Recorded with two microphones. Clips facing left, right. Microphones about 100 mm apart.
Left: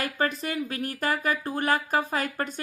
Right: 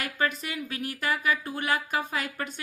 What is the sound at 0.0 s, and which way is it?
A woman's voice, 40° left (ahead or behind).